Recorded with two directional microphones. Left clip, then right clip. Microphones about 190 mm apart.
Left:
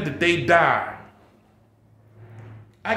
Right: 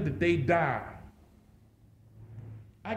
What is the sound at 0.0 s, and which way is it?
Speech, 15° left (ahead or behind).